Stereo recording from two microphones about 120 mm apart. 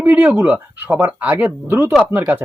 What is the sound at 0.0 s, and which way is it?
Speech, 15° right (ahead or behind).